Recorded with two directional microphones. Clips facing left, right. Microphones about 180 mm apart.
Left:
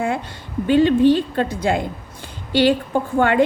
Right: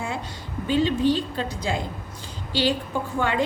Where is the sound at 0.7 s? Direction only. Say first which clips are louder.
Left 7 dB; 60° left (ahead or behind).